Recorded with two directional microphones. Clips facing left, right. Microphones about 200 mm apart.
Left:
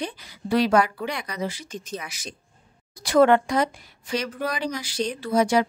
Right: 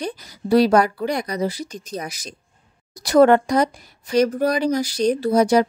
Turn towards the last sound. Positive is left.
turn(degrees=-40)  # may be behind; listen again after turning